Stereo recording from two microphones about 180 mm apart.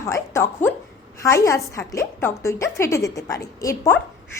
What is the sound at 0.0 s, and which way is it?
A woman's voice, 15° left (ahead or behind).